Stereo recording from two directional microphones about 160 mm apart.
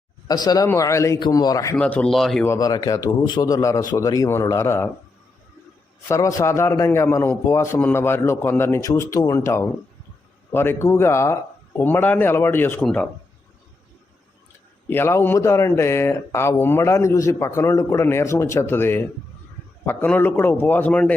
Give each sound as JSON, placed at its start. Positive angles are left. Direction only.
{"t": 0.3, "sound": "a man's voice", "side_deg": 25}
{"t": 1.7, "sound": "speech", "side_deg": 5}
{"t": 2.4, "sound": "a man's voice", "side_deg": 20}
{"t": 6.1, "sound": "speech", "side_deg": 20}
{"t": 14.8, "sound": "speech", "side_deg": 15}